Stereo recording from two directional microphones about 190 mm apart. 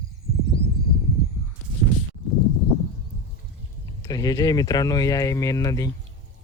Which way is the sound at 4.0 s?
20° left (ahead or behind).